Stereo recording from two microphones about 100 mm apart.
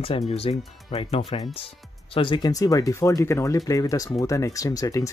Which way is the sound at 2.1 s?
55° left (ahead or behind).